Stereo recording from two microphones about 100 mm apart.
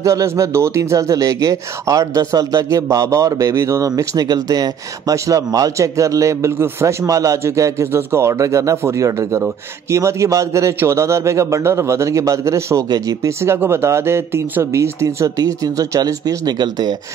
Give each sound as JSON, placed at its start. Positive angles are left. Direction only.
{"t": 0.0, "sound": "a man's voice", "side_deg": -30}